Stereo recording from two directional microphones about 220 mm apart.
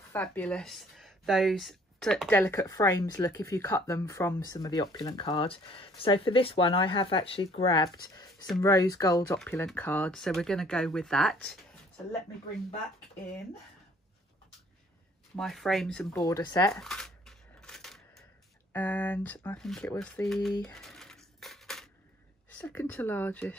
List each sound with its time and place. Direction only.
0.1 s speech: 10° left (ahead or behind)
9.4 s speech: 5° left (ahead or behind)
15.3 s speech: centre (ahead or behind)
16.2 s speech: 15° left (ahead or behind)
16.7 s a sound: centre (ahead or behind)
18.7 s speech: 10° left (ahead or behind)
20.7 s a sound: centre (ahead or behind)
22.6 s speech: 10° left (ahead or behind)